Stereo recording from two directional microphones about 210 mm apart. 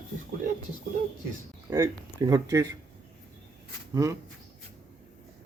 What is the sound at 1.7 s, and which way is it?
Speech, 15° right (ahead or behind).